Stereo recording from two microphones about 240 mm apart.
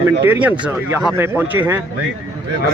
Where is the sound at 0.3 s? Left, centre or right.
Centre.